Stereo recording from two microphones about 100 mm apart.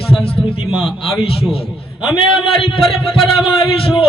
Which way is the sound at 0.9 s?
Centre (ahead or behind).